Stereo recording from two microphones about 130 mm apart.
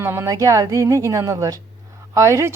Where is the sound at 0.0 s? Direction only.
20° right (ahead or behind).